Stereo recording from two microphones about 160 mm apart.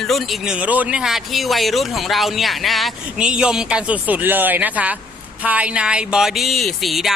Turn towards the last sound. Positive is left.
turn(degrees=0)  # may be behind; listen again after turning